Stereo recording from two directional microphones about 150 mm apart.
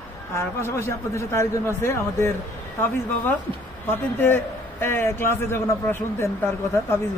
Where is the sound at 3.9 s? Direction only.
15° left (ahead or behind).